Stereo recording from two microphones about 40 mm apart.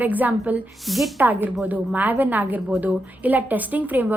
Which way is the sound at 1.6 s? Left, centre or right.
Right.